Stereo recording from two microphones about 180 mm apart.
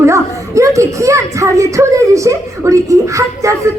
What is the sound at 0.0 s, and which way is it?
Speech, 15° right (ahead or behind).